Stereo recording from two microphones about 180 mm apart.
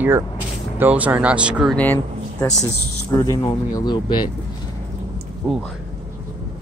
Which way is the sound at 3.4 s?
25° left (ahead or behind).